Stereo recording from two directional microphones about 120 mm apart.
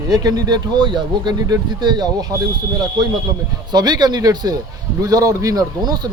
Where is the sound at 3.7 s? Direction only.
35° right (ahead or behind).